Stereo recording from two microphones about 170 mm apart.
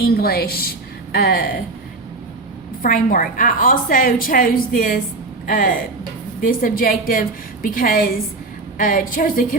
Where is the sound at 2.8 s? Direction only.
55° left (ahead or behind).